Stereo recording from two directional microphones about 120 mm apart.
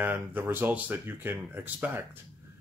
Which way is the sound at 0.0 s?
15° right (ahead or behind).